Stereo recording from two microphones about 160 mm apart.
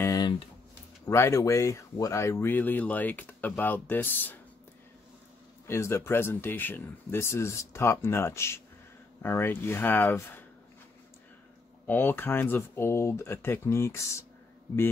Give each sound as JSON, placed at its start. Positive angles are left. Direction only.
{"t": 0.0, "sound": "a sound", "side_deg": 25}
{"t": 1.0, "sound": "speech", "side_deg": 20}
{"t": 5.7, "sound": "speech", "side_deg": 15}
{"t": 11.8, "sound": "speech", "side_deg": 10}